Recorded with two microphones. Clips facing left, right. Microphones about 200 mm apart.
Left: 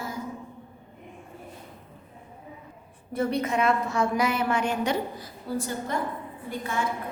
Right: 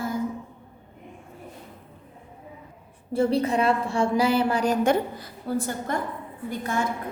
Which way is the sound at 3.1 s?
30° right (ahead or behind).